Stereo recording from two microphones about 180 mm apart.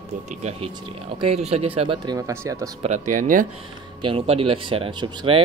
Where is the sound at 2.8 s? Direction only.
45° right (ahead or behind).